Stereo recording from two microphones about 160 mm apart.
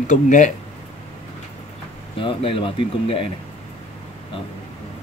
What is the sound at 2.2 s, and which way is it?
Speech, 35° left (ahead or behind).